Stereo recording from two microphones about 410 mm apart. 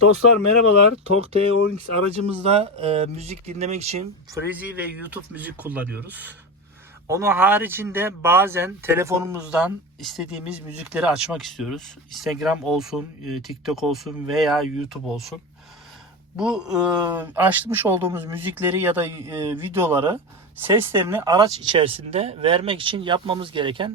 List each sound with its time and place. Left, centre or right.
0.0 s speech: left
1.0 s speech: centre
4.4 s speech: centre
16.4 s speech: centre